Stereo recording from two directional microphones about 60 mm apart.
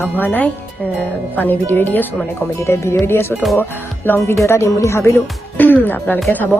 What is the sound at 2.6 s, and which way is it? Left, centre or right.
Speech, left.